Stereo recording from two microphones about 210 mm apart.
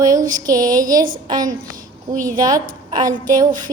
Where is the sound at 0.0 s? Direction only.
15° right (ahead or behind).